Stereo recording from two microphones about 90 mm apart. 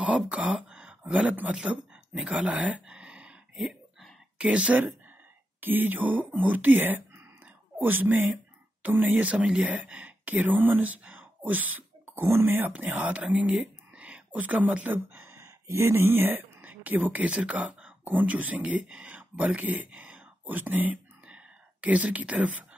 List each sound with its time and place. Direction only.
0.0 s speech: 15° right (ahead or behind)